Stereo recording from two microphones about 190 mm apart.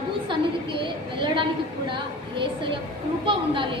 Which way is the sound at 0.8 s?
25° right (ahead or behind).